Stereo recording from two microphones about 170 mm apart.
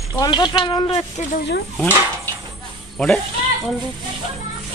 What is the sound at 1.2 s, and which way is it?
Speech, 45° left (ahead or behind).